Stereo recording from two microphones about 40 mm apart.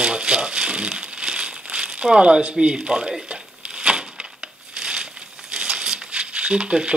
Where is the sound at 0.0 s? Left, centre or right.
Right.